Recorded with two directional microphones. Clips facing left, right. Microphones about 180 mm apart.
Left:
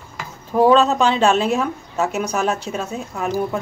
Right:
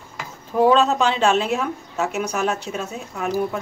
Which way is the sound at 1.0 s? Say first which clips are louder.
Left 2 dB; 40° left (ahead or behind).